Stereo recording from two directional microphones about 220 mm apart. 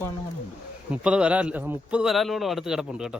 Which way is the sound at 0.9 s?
5° right (ahead or behind).